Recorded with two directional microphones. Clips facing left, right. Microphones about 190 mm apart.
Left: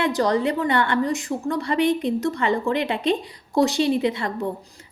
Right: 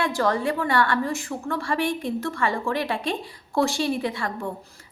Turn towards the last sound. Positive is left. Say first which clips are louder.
# left 4 dB
turn(degrees=20)  # may be behind; listen again after turning